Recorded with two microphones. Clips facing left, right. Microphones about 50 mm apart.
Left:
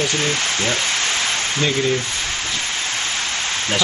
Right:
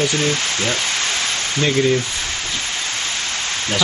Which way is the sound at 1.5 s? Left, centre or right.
Centre.